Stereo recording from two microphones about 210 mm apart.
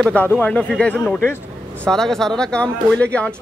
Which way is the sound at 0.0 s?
5° left (ahead or behind).